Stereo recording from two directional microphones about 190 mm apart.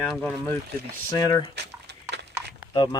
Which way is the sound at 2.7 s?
25° left (ahead or behind).